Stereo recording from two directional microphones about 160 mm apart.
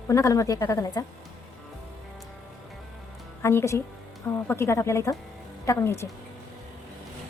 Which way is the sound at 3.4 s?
15° left (ahead or behind).